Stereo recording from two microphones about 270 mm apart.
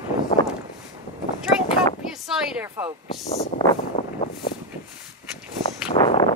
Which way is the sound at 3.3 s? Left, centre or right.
Centre.